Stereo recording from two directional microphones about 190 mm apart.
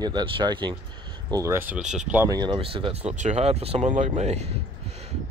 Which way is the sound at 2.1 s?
15° right (ahead or behind).